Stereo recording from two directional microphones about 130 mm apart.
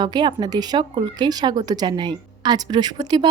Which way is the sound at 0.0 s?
35° right (ahead or behind).